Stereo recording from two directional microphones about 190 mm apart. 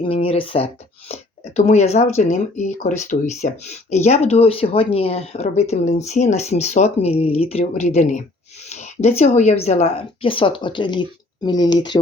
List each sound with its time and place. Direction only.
0.0 s speech: 30° left (ahead or behind)